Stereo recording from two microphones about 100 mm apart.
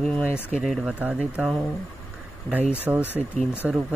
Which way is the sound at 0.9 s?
15° right (ahead or behind).